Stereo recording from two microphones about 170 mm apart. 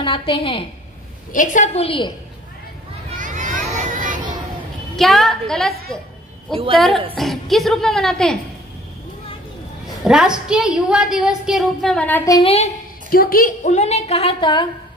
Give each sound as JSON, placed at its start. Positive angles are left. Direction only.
{"t": 0.0, "sound": "a woman's voice", "side_deg": 30}
{"t": 1.3, "sound": "a woman's voice", "side_deg": 50}
{"t": 3.2, "sound": "a sound", "side_deg": -50}
{"t": 4.9, "sound": "a woman's voice", "side_deg": 0}
{"t": 6.5, "sound": "a woman's voice", "side_deg": -30}
{"t": 7.2, "sound": "a woman's voice", "side_deg": 0}
{"t": 10.0, "sound": "a woman's voice", "side_deg": -5}
{"t": 12.3, "sound": "a woman's voice", "side_deg": 30}
{"t": 13.1, "sound": "a woman's voice", "side_deg": 60}